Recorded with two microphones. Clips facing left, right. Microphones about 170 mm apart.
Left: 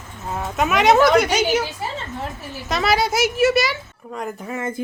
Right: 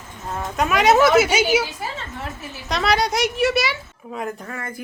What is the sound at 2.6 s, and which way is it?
Speech, centre (ahead or behind).